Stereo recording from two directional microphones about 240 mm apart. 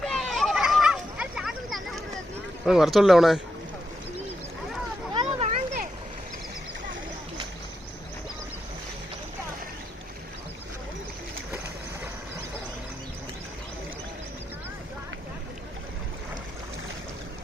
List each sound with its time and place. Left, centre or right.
0.0 s children playing: centre
2.6 s speech: centre
5.1 s a sound: right